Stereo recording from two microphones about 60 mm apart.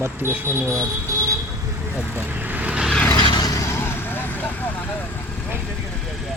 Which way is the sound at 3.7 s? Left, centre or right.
Left.